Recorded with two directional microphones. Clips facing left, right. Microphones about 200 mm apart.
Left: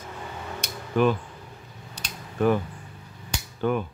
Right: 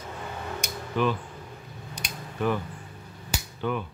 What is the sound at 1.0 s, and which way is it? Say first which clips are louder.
Speech: left 4 dB; 45° left (ahead or behind).